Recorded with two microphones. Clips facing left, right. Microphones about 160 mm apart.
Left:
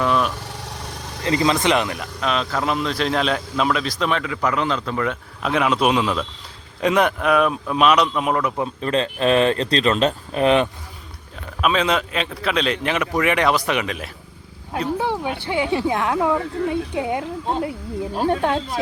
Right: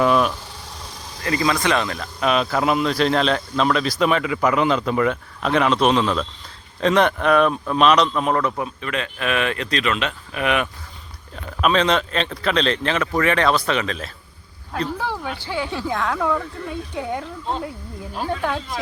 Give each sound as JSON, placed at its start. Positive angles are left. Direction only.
{"t": 0.0, "sound": "vehicle", "side_deg": -5}
{"t": 1.2, "sound": "speech", "side_deg": 20}
{"t": 2.2, "sound": "a man's voice", "side_deg": -10}
{"t": 5.4, "sound": "speech", "side_deg": 5}
{"t": 8.5, "sound": "speech", "side_deg": 30}
{"t": 11.6, "sound": "speech", "side_deg": 5}
{"t": 18.1, "sound": "speech", "side_deg": 30}